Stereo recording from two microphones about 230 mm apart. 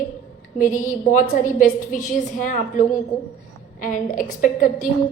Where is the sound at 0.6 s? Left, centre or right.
Left.